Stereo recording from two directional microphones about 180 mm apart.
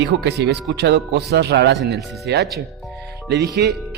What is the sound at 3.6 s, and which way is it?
Speech, 65° right (ahead or behind).